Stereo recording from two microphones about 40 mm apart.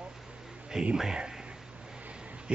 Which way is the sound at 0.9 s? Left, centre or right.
Centre.